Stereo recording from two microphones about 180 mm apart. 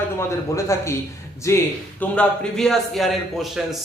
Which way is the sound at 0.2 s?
15° left (ahead or behind).